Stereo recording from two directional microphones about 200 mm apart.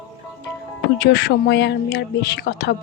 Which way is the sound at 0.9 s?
55° left (ahead or behind).